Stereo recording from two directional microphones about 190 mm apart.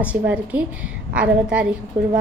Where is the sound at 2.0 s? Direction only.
35° right (ahead or behind).